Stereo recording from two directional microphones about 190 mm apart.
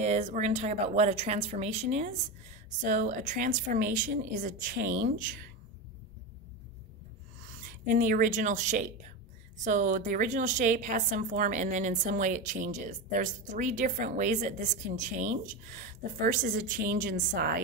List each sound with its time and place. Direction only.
0.0 s a woman's voice: 40° right (ahead or behind)
7.8 s a woman's voice: 45° right (ahead or behind)